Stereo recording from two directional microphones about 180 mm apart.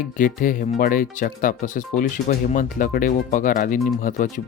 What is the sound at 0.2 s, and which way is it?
Speech, 50° left (ahead or behind).